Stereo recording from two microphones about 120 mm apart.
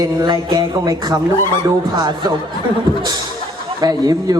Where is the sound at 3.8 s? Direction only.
35° right (ahead or behind).